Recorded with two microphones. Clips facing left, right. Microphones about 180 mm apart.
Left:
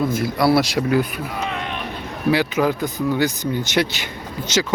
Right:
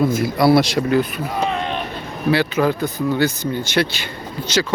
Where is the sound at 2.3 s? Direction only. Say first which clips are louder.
Right 1 dB; 15° left (ahead or behind).